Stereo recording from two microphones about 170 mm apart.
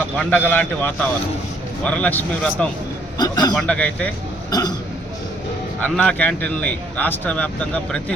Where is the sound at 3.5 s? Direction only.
5° left (ahead or behind).